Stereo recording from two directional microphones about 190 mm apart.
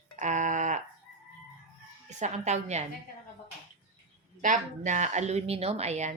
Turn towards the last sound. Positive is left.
turn(degrees=-35)  # may be behind; listen again after turning